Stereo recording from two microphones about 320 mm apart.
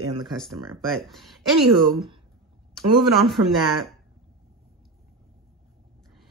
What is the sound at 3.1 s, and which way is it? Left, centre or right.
Speech, centre.